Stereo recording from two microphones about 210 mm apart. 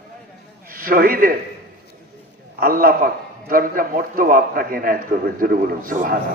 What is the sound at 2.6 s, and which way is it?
A man's voice, 45° right (ahead or behind).